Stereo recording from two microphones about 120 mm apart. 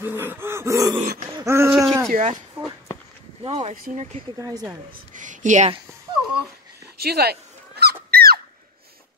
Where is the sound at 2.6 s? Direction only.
55° right (ahead or behind); by 4.1 s 75° right (ahead or behind).